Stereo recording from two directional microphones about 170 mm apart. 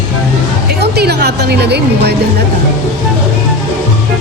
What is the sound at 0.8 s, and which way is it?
A woman's voice, 75° right (ahead or behind).